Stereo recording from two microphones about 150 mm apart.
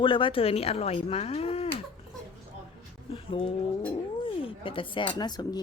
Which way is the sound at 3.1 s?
35° left (ahead or behind).